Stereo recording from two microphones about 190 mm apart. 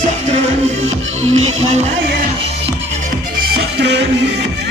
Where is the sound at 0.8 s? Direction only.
35° right (ahead or behind).